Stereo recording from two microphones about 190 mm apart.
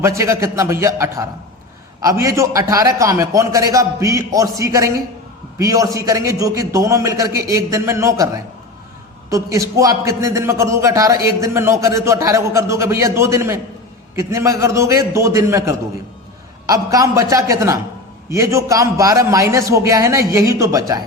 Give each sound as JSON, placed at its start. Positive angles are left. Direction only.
{"t": 0.0, "sound": "a man's voice", "side_deg": -15}
{"t": 9.3, "sound": "a man's voice", "side_deg": -15}